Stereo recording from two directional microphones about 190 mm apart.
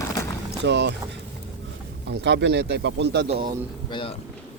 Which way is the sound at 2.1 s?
60° right (ahead or behind).